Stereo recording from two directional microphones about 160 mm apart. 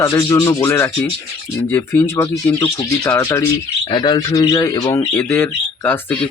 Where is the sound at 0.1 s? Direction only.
20° left (ahead or behind).